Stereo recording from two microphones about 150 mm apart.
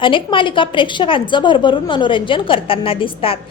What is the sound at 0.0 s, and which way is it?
A woman's voice, 35° left (ahead or behind).